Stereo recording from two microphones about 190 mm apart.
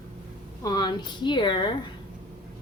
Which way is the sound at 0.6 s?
20° left (ahead or behind).